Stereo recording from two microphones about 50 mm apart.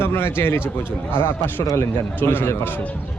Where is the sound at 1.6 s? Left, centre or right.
Left.